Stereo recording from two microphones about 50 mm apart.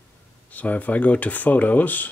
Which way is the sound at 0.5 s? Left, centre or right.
Left.